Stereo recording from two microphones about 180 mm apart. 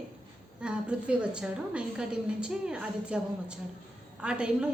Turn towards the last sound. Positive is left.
turn(degrees=-5)  # may be behind; listen again after turning